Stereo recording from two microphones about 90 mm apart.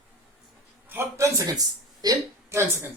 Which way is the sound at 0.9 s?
30° right (ahead or behind).